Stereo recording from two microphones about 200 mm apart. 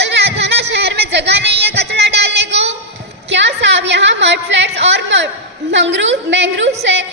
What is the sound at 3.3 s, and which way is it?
A woman's voice, 65° right (ahead or behind).